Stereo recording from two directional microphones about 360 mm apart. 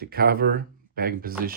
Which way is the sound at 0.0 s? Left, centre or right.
Right.